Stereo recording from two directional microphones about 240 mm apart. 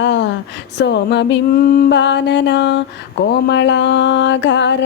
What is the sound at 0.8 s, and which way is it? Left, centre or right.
Music, left.